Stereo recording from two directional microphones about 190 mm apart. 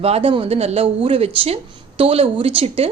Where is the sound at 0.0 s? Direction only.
30° right (ahead or behind).